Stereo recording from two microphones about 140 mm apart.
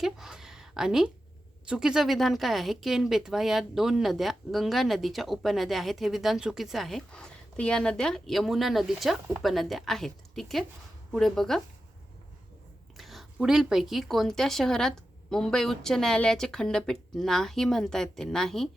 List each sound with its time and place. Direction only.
0.0 s a woman's voice: 5° right (ahead or behind)
13.0 s speech: centre (ahead or behind)